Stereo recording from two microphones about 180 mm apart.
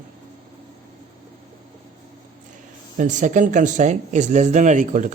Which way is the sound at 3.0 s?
45° right (ahead or behind).